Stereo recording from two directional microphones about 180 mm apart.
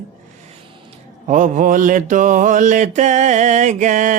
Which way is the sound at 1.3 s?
45° right (ahead or behind).